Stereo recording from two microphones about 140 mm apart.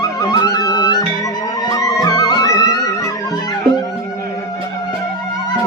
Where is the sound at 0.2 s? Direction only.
30° left (ahead or behind).